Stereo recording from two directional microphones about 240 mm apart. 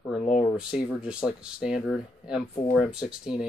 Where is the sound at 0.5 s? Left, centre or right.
Centre.